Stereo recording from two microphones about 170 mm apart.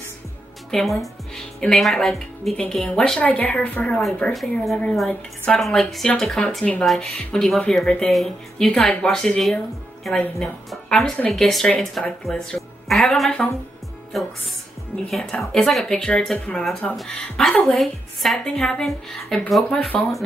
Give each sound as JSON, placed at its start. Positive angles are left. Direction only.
{"t": 0.7, "sound": "a woman's voice", "side_deg": 0}
{"t": 14.1, "sound": "music", "side_deg": 0}
{"t": 15.0, "sound": "a woman's voice", "side_deg": 0}